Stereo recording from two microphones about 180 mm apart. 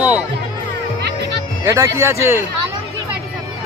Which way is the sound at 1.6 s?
15° right (ahead or behind).